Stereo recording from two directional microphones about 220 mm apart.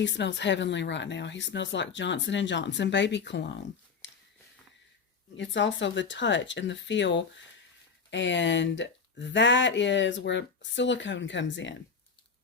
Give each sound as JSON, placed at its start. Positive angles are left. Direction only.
{"t": 0.0, "sound": "speech", "side_deg": 55}
{"t": 4.0, "sound": "a sound", "side_deg": 55}
{"t": 5.4, "sound": "speech", "side_deg": 55}